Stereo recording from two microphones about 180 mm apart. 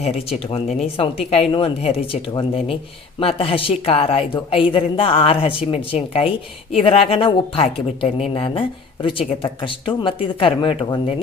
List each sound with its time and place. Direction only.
0.0 s a woman's voice: 35° left (ahead or behind)